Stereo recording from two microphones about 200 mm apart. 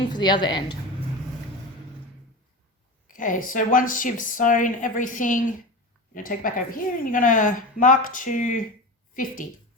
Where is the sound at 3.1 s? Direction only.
40° left (ahead or behind).